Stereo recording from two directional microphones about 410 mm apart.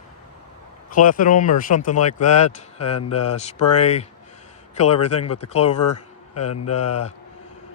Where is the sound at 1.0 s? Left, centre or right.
Centre.